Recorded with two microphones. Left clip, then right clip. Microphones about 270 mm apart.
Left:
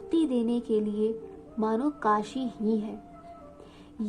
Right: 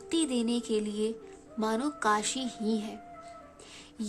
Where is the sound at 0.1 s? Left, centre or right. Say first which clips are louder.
Left 3 dB; right.